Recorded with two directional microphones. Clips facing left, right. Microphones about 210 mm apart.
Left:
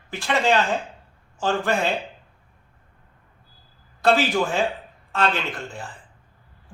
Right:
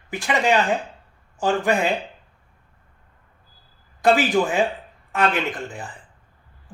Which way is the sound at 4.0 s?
15° right (ahead or behind).